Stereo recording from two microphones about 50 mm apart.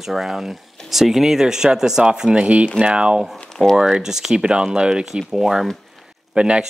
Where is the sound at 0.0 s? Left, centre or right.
Centre; by 3.2 s right.